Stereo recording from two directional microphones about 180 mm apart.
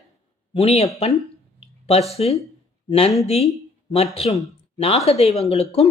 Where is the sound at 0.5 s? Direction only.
35° left (ahead or behind).